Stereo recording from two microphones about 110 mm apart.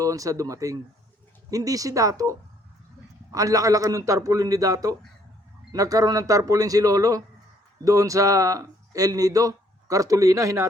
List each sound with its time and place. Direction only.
0.0 s speech: 30° right (ahead or behind)
3.3 s speech: 30° right (ahead or behind)